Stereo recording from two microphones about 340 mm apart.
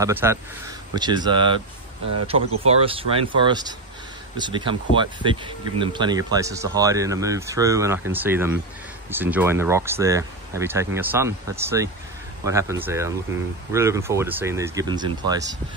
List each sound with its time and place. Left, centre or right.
0.0 s speech: centre
2.6 s speech: centre